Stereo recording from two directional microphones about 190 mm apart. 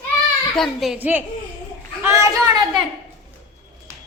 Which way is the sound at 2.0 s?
15° right (ahead or behind).